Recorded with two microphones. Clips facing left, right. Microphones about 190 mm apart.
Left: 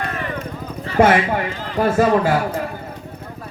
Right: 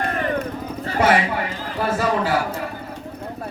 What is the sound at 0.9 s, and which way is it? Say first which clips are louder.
A man's voice: left 4 dB; 50° left (ahead or behind).